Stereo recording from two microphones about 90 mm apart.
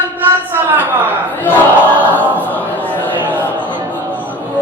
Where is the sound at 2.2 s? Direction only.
20° right (ahead or behind).